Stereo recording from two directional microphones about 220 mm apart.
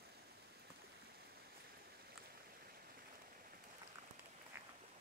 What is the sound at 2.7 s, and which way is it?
Stream, 40° right (ahead or behind).